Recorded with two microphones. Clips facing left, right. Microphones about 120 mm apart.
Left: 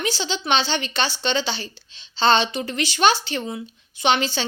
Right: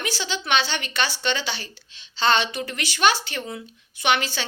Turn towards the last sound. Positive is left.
turn(degrees=25)  # may be behind; listen again after turning